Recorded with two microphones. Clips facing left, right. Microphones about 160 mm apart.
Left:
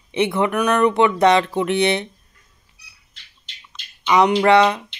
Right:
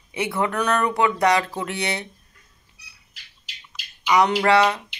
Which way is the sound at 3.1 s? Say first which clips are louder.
Right 1 dB; 5° right (ahead or behind).